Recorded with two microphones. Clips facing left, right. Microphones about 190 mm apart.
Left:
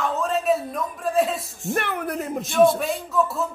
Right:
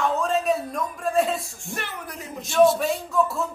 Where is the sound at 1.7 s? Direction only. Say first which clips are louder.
Left 9 dB; 55° left (ahead or behind).